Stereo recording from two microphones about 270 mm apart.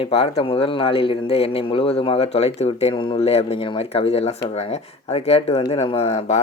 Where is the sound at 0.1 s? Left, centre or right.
Left.